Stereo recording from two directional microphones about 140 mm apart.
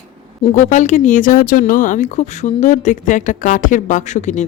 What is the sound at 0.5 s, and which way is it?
A woman's voice, 60° left (ahead or behind).